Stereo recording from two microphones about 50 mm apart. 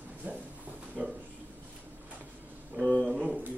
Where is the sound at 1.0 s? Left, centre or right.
Right.